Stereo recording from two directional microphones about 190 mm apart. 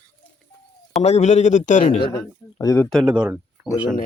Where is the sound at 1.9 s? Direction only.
25° left (ahead or behind).